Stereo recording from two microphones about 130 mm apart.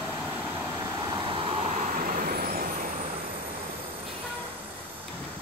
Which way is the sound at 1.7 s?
85° right.